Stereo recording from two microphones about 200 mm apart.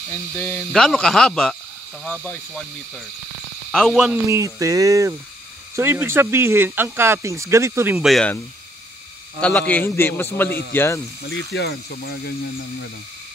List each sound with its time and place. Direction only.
0.4 s speech: 5° left (ahead or behind)
3.7 s speech: centre (ahead or behind)
8.1 s speech: 5° left (ahead or behind)
9.4 s a man's voice: 5° left (ahead or behind)
11.2 s speech: 55° left (ahead or behind)